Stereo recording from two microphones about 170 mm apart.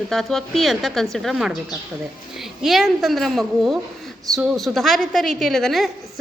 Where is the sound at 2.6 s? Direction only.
Centre (ahead or behind).